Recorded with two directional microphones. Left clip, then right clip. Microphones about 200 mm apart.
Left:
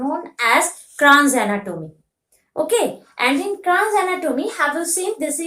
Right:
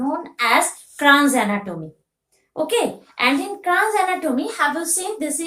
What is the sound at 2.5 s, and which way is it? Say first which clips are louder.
A woman's voice: left 2 dB; 25° left (ahead or behind).